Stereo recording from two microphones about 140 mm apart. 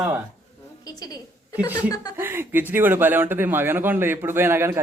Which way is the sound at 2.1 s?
15° right (ahead or behind).